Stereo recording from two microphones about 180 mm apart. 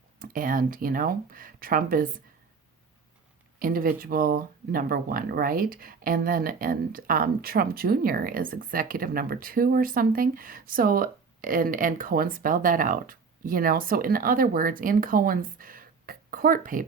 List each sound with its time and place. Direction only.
0.2 s speech: 50° right (ahead or behind)
3.6 s speech: 55° right (ahead or behind)